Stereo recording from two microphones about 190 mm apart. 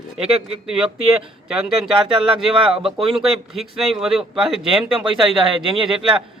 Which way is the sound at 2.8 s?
Centre (ahead or behind).